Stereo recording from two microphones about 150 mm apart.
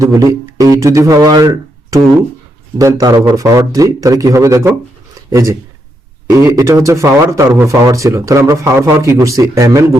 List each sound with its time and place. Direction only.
0.0 s speech: 20° right (ahead or behind)